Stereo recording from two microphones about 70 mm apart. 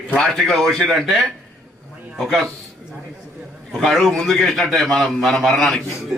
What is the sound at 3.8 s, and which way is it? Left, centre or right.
A man's voice, centre.